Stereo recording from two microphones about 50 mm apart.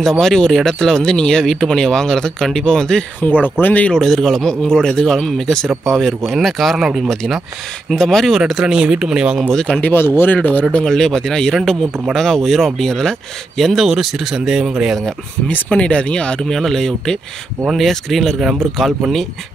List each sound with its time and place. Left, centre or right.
0.2 s speech: centre
3.2 s speech: left
3.9 s speech: centre
7.9 s speech: centre
8.3 s speech: centre
8.7 s speech: centre
9.5 s speech: centre
9.9 s speech: left
10.3 s speech: left
10.9 s speech: centre
13.8 s speech: centre
15.5 s speech: left; by 18.9 s centre